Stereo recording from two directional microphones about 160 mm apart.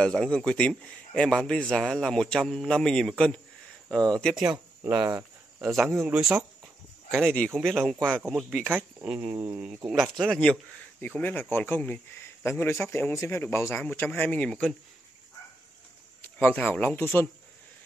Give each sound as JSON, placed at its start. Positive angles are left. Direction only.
{"t": 0.0, "sound": "a man's voice", "side_deg": 5}
{"t": 4.9, "sound": "speech", "side_deg": -25}
{"t": 7.1, "sound": "a man's voice", "side_deg": 0}
{"t": 10.1, "sound": "speech", "side_deg": 0}
{"t": 16.2, "sound": "a man's voice", "side_deg": 10}